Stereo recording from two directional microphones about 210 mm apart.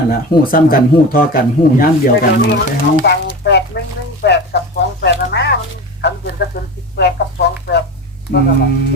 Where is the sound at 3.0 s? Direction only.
55° left (ahead or behind).